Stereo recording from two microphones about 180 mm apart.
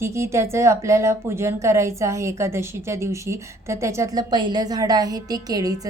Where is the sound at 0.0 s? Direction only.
15° right (ahead or behind).